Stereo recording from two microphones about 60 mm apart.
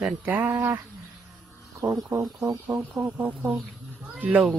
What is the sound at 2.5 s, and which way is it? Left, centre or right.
Speech, right.